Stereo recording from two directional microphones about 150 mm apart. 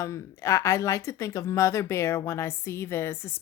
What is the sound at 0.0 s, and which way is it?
Speech, 20° left (ahead or behind).